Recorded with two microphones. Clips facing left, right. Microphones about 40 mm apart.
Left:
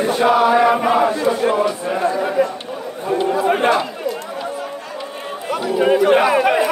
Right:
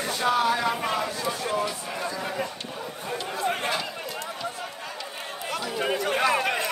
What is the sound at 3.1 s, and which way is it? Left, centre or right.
Chatter, left.